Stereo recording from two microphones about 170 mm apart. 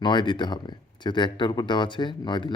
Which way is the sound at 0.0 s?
25° left (ahead or behind).